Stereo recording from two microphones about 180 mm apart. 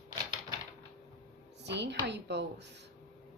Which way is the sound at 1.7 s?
75° right (ahead or behind).